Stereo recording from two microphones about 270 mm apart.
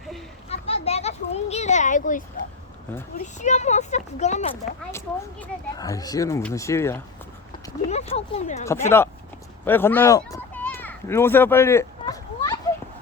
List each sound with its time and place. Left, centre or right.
0.4 s children playing: left
3.3 s speech: left
4.9 s speech: centre
7.9 s speech: left
8.6 s speech: centre
9.6 s children playing: centre